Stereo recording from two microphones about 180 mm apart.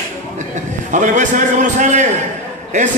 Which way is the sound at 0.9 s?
45° right (ahead or behind).